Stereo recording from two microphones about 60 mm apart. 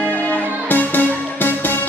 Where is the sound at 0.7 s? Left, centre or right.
Left.